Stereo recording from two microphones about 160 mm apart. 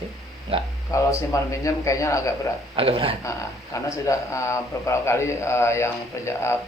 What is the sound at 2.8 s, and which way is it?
Speech, 35° right (ahead or behind).